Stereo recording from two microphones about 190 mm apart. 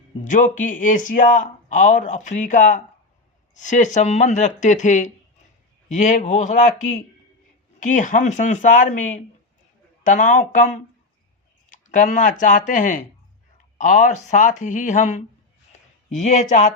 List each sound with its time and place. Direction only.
0.3 s speech: 40° left (ahead or behind)